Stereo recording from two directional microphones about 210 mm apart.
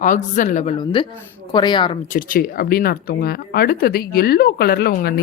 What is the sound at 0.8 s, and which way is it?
Speech, 25° left (ahead or behind).